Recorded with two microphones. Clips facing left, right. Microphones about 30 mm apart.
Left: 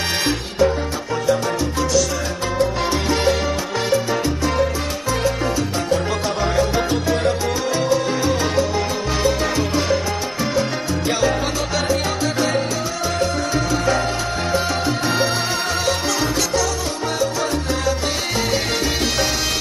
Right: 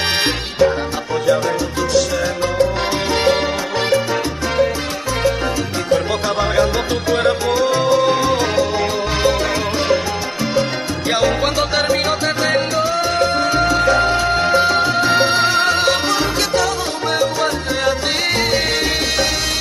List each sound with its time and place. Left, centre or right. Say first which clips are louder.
0.1 s music: right 3 dB; right
5.9 s music: right 3 dB; right
11.1 s music: right 4 dB; right